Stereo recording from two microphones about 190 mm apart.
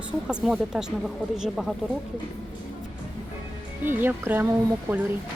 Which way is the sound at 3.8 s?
10° right (ahead or behind).